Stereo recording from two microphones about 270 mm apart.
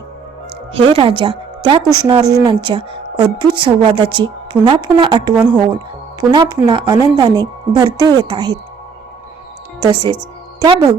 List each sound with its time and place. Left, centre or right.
0.7 s a woman's voice: right
9.8 s speech: centre